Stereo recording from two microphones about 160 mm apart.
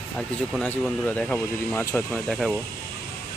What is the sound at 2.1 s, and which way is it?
Speech, centre (ahead or behind).